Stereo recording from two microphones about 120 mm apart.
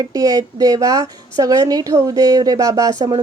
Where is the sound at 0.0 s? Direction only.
30° right (ahead or behind).